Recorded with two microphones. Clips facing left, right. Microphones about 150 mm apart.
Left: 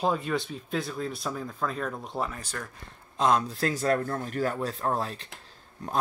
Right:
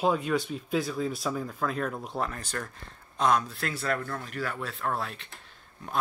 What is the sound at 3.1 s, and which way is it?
Speech, 25° left (ahead or behind).